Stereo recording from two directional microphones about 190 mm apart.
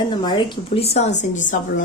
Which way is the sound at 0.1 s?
25° left (ahead or behind).